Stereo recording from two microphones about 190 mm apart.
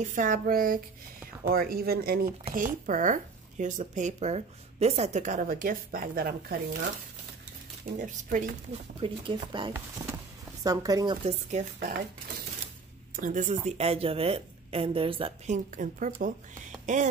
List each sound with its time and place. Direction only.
0.0 s a woman's voice: 40° right (ahead or behind)
8.0 s a woman's voice: 45° right (ahead or behind)
9.0 s speech: 25° right (ahead or behind)
11.2 s speech: 40° right (ahead or behind)
13.1 s speech: 45° right (ahead or behind)